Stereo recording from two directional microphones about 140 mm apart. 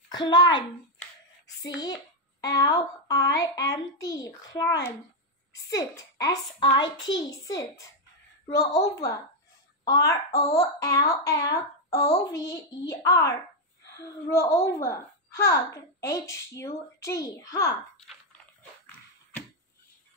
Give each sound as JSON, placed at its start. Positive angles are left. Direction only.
{"t": 0.1, "sound": "a child's voice", "side_deg": 30}